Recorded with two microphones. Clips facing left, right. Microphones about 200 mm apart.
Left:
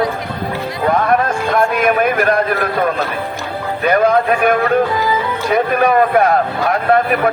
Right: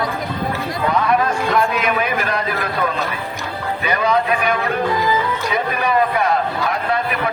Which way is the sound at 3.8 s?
50° left (ahead or behind).